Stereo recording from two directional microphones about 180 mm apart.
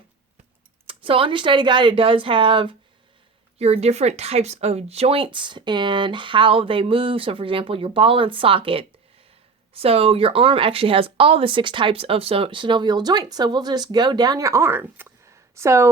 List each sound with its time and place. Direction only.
0.9 s speech: 30° right (ahead or behind); by 15.9 s 15° right (ahead or behind)